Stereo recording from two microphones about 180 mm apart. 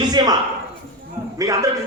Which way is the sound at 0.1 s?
20° right (ahead or behind).